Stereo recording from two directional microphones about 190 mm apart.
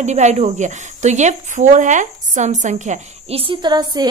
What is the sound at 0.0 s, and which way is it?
Speech, 35° right (ahead or behind).